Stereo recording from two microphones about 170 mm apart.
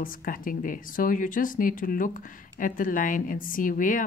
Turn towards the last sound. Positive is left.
turn(degrees=50)  # may be behind; listen again after turning